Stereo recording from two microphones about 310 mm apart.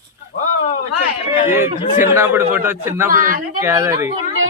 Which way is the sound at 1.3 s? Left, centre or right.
Centre.